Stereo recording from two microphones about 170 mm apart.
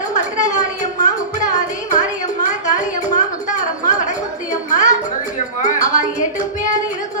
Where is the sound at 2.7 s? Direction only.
45° left (ahead or behind).